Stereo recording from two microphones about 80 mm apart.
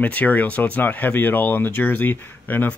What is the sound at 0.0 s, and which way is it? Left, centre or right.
Speech, centre.